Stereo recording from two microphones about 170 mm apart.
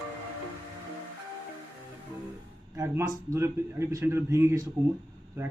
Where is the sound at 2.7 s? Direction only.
15° right (ahead or behind).